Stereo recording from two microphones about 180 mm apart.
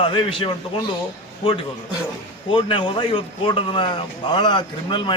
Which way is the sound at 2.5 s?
30° left (ahead or behind).